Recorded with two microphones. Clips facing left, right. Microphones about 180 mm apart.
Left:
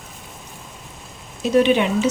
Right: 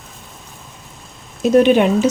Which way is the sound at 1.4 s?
45° right (ahead or behind).